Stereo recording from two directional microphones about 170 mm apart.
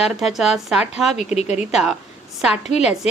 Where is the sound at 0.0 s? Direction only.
Centre (ahead or behind).